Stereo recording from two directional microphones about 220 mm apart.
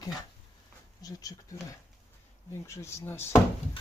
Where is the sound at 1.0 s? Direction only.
15° left (ahead or behind).